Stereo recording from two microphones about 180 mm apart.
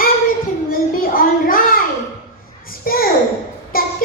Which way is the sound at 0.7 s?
50° left (ahead or behind).